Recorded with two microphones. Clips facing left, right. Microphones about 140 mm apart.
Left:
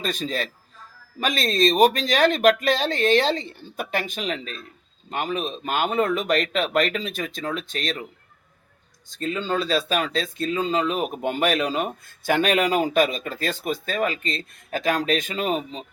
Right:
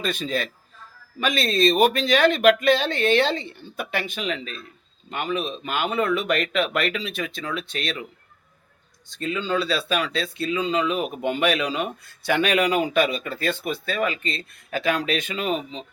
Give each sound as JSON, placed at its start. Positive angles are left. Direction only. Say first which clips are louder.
{"t": 0.0, "sound": "speech", "louder": "right 1 dB", "side_deg": 40}
{"t": 9.1, "sound": "speech", "louder": "even", "side_deg": 45}